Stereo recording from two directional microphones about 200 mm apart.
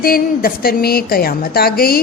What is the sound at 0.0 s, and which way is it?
A woman's voice, 50° left (ahead or behind).